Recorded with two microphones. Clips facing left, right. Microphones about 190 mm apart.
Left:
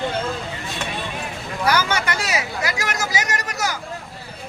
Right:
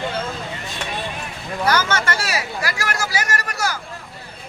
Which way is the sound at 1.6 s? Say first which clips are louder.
Right 1 dB; 10° left (ahead or behind).